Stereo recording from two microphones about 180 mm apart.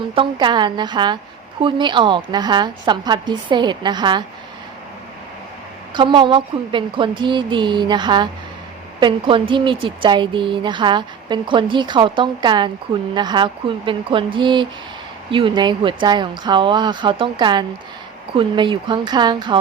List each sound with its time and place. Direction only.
0.1 s a woman's voice: 30° right (ahead or behind)
5.9 s a woman's voice: 25° right (ahead or behind)